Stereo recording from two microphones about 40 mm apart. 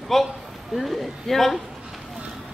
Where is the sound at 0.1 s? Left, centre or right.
Centre.